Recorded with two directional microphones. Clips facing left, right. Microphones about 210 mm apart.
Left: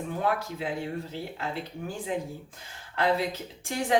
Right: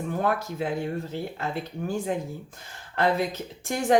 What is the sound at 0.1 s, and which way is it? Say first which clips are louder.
Speech: right 2 dB; 50° right (ahead or behind).